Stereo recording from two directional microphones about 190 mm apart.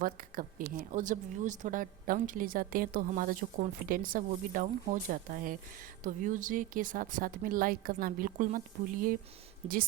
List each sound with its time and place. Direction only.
0.0 s speech: 45° right (ahead or behind)